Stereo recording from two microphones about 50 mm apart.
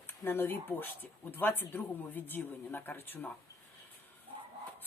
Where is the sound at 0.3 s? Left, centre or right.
Left.